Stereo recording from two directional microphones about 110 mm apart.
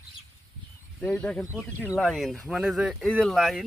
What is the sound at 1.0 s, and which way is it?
Speech, 10° left (ahead or behind).